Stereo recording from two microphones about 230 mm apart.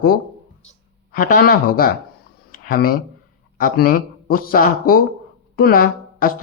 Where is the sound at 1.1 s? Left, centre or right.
Left.